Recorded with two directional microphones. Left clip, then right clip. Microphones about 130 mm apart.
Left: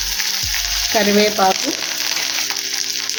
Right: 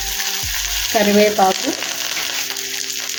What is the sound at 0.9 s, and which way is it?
Frying, 15° left (ahead or behind).